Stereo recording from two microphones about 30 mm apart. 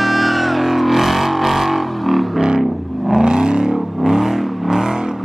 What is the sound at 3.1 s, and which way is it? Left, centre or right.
Vehicle, right.